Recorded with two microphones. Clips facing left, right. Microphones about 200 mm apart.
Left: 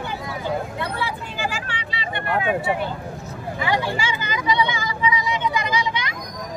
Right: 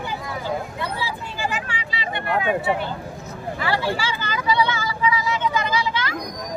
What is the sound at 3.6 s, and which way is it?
Vehicle, 15° left (ahead or behind).